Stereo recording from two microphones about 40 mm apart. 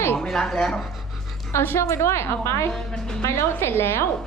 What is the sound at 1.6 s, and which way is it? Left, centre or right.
A woman's voice, left.